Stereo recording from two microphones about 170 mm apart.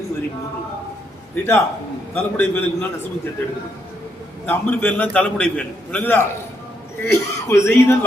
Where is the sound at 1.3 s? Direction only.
10° left (ahead or behind).